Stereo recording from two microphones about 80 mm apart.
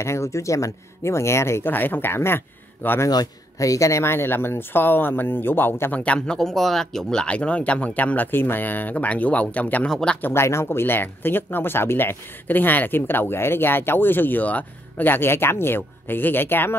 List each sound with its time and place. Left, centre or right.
0.0 s speech: left
3.1 s speech: left; by 9.8 s centre
9.8 s speech: centre
10.2 s speech: left